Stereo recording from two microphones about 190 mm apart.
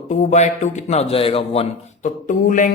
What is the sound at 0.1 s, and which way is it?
A man's voice, 40° left (ahead or behind).